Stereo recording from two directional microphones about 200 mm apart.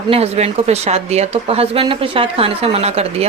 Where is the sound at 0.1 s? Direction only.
30° right (ahead or behind).